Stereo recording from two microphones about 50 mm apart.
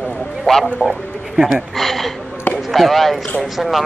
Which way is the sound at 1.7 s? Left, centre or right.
Centre.